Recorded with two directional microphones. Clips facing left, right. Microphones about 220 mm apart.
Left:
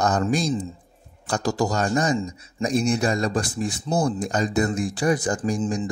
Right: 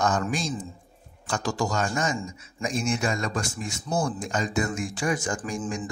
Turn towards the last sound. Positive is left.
turn(degrees=35)  # may be behind; listen again after turning